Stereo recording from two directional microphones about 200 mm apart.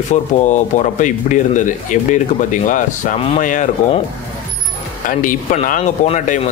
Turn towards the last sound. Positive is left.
turn(degrees=35)  # may be behind; listen again after turning